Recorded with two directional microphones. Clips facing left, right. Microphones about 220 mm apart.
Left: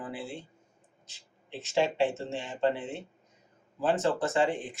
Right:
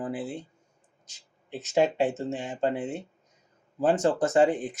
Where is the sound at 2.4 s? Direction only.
45° right (ahead or behind).